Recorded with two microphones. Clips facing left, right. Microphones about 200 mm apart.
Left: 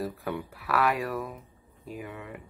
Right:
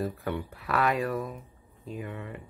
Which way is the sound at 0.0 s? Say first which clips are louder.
Right 1 dB; centre (ahead or behind).